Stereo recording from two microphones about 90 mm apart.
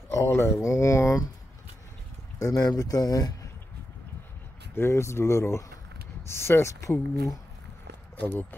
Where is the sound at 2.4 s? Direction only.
45° left (ahead or behind).